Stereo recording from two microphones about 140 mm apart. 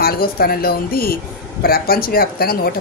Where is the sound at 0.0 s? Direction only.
90° left.